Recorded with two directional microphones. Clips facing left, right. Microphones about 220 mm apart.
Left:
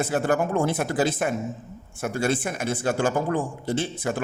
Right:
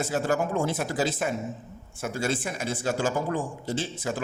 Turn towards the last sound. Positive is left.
turn(degrees=55)  # may be behind; listen again after turning